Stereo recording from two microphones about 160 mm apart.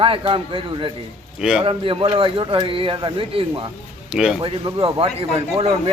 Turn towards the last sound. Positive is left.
turn(degrees=-40)  # may be behind; listen again after turning